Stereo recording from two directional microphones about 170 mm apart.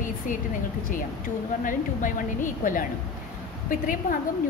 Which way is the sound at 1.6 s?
50° left (ahead or behind).